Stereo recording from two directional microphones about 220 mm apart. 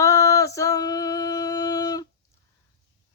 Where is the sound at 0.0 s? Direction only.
15° left (ahead or behind).